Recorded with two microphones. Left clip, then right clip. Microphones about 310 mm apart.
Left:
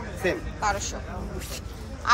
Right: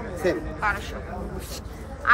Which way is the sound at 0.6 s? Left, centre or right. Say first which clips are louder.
Right 1 dB; centre.